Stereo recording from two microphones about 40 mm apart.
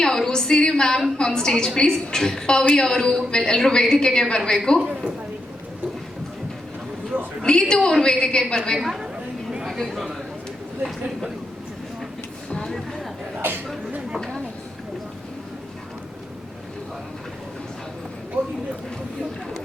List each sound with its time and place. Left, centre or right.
0.0 s a woman's voice: centre
4.8 s a man's voice: right
7.4 s a woman's voice: centre
8.8 s speech: centre
14.2 s a sound: centre
18.4 s speech: right